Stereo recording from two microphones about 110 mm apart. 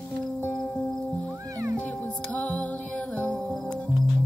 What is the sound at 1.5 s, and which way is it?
Music, 25° right (ahead or behind).